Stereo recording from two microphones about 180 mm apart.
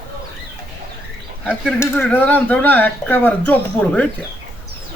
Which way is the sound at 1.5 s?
10° left (ahead or behind).